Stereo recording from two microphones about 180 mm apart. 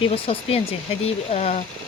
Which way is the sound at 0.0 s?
30° left (ahead or behind).